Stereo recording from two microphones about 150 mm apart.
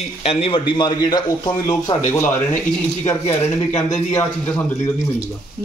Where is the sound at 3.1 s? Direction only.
15° left (ahead or behind).